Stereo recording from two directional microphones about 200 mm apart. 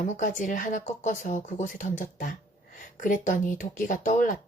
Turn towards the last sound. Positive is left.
turn(degrees=40)  # may be behind; listen again after turning